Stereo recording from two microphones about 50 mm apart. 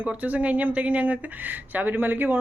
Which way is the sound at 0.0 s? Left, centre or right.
Right.